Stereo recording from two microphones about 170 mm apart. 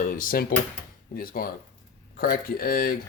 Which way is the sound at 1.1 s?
55° left (ahead or behind).